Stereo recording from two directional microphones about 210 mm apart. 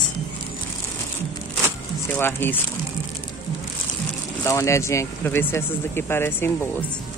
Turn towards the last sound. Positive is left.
turn(degrees=10)  # may be behind; listen again after turning